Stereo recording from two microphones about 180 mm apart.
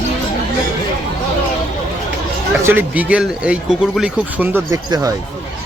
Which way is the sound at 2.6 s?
10° right (ahead or behind).